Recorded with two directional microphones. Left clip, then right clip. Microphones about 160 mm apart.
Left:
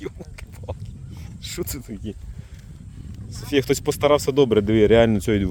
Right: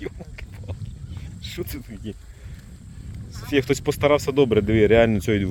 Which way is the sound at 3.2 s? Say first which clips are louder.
Left 1 dB; 20° left (ahead or behind).